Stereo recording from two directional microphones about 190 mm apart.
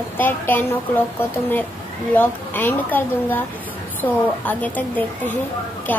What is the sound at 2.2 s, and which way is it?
A woman's voice, 10° left (ahead or behind).